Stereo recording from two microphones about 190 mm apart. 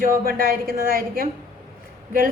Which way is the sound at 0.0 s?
50° right (ahead or behind).